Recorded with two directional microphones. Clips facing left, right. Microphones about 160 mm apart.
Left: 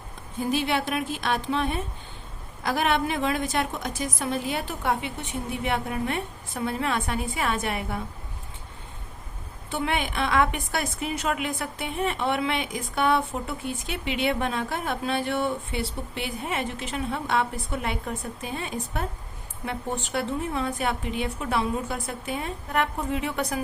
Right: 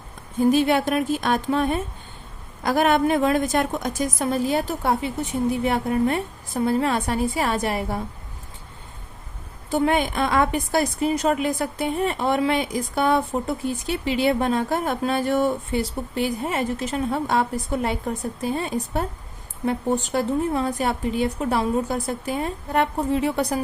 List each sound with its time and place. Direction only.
0.5 s a woman's voice: 45° right (ahead or behind)
9.6 s a woman's voice: 40° right (ahead or behind)